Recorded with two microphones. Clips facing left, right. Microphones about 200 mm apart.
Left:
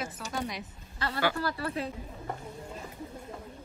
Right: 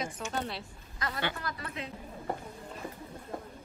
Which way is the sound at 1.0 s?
30° left (ahead or behind).